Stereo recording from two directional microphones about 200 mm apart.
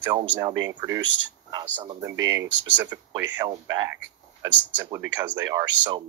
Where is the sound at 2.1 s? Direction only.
70° right (ahead or behind).